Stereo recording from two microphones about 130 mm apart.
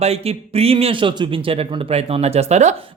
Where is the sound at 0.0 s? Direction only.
50° right (ahead or behind).